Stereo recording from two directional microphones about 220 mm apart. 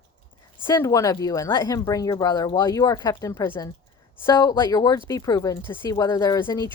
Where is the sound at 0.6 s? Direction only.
20° left (ahead or behind).